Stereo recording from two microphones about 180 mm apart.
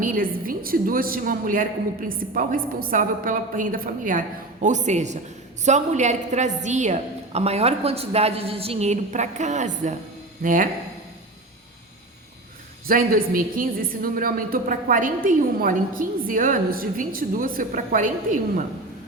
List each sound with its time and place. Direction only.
0.0 s a woman's voice: 50° right (ahead or behind)
12.9 s a woman's voice: 50° right (ahead or behind)